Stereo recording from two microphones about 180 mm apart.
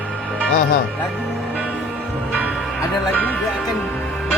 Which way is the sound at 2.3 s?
5° right (ahead or behind).